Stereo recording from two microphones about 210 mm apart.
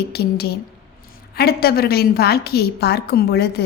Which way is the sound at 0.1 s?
50° left (ahead or behind).